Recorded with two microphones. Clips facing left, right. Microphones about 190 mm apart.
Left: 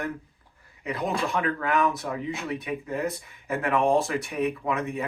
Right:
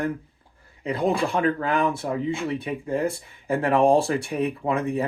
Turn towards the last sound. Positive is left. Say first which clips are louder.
# right 4 dB
turn(degrees=-30)  # may be behind; listen again after turning